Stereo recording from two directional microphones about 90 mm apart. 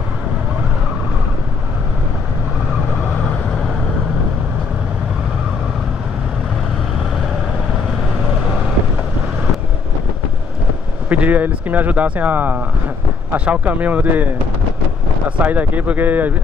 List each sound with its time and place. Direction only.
11.1 s speech: 15° right (ahead or behind)